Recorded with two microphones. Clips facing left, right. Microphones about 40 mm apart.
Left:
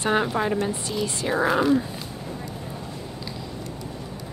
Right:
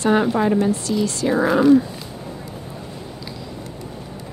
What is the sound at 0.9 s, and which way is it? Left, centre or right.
Speech, centre.